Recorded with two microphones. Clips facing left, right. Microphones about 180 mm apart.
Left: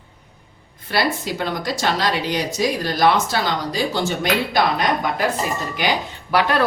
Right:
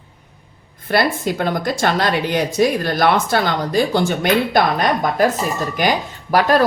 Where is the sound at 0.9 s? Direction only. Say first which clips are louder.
Right 4 dB; 50° right (ahead or behind).